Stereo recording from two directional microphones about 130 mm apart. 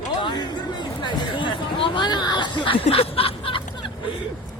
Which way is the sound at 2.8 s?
50° left (ahead or behind).